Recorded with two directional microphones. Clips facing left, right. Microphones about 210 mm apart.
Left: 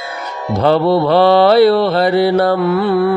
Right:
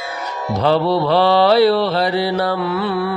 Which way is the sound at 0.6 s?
55° left (ahead or behind).